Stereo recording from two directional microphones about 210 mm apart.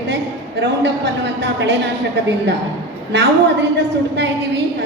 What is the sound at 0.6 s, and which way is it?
A woman's voice, 55° right (ahead or behind).